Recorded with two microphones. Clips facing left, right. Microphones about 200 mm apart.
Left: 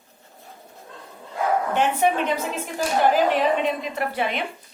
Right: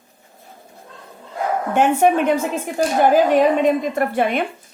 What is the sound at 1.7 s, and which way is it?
A woman's voice, 50° right (ahead or behind).